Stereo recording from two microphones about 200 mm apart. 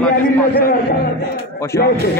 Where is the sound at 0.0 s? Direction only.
10° left (ahead or behind).